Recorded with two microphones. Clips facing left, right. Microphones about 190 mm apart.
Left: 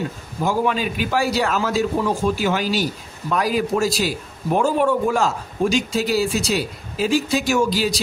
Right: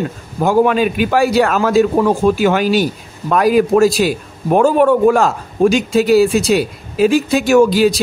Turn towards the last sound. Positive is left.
turn(degrees=-55)  # may be behind; listen again after turning